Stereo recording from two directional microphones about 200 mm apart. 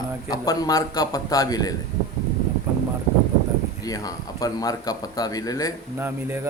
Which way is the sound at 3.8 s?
20° left (ahead or behind).